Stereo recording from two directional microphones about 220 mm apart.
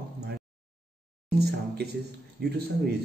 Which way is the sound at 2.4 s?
45° right (ahead or behind).